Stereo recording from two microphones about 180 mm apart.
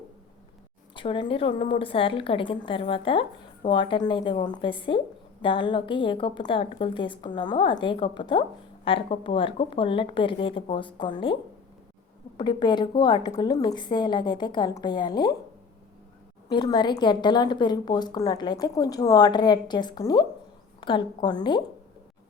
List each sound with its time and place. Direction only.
0.9 s a woman's voice: 30° left (ahead or behind)
12.4 s a woman's voice: 25° left (ahead or behind)
16.5 s a woman's voice: 25° left (ahead or behind)